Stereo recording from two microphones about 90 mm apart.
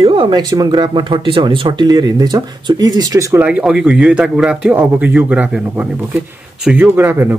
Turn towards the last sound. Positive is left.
turn(degrees=-25)  # may be behind; listen again after turning